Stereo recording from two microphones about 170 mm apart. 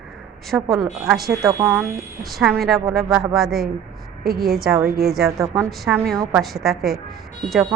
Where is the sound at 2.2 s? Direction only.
Centre (ahead or behind).